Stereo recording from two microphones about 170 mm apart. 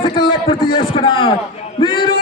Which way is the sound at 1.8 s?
30° left (ahead or behind).